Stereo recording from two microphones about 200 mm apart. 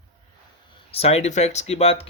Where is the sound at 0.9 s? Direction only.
30° left (ahead or behind).